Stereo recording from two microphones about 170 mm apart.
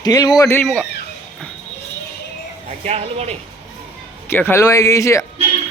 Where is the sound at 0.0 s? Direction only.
25° left (ahead or behind).